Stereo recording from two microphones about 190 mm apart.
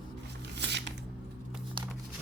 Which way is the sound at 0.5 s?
65° right (ahead or behind).